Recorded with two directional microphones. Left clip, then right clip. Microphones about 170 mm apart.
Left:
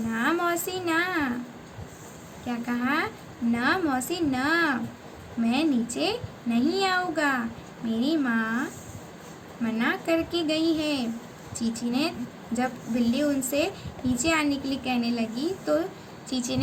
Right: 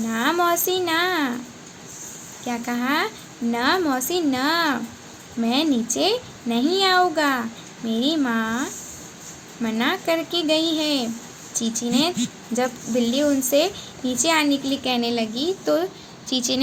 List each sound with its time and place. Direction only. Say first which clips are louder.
0.1 s a sound: right 5 dB; 55° right (ahead or behind)
2.5 s a woman's voice: right 4 dB; 55° right (ahead or behind)
9.6 s a woman's voice: right 4 dB; 55° right (ahead or behind)